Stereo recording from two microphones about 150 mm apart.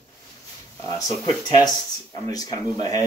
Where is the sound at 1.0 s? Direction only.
25° left (ahead or behind).